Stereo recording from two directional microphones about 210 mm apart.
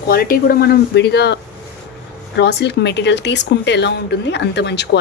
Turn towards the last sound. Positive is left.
turn(degrees=55)  # may be behind; listen again after turning